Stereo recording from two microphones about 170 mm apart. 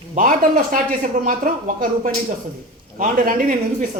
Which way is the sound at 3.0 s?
55° right (ahead or behind).